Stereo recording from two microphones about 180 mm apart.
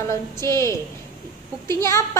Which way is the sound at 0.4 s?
15° left (ahead or behind).